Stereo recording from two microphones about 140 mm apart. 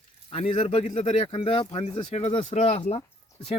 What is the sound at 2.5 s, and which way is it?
Speech, 55° left (ahead or behind).